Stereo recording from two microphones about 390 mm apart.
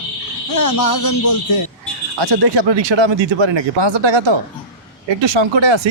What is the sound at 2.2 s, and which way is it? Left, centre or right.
Speech, right.